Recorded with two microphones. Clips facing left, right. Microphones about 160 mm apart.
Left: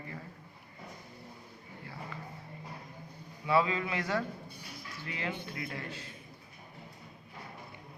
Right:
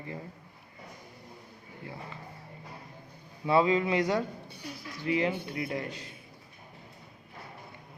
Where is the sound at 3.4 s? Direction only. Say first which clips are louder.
Right 5 dB; 25° right (ahead or behind).